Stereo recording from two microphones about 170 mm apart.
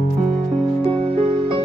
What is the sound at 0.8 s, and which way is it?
Music, 35° right (ahead or behind).